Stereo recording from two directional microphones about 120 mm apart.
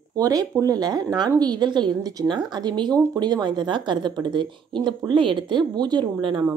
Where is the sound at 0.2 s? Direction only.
30° right (ahead or behind).